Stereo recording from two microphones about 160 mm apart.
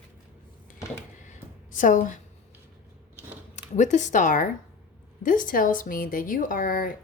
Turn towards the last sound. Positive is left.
turn(degrees=60)  # may be behind; listen again after turning